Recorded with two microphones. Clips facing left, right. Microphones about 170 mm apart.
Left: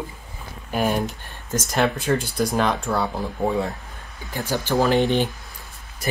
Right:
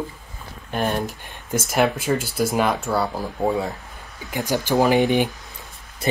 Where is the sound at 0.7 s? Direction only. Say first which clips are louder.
Left 1 dB; 5° left (ahead or behind).